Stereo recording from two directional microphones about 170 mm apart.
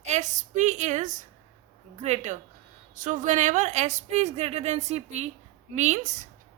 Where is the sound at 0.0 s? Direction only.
45° right (ahead or behind).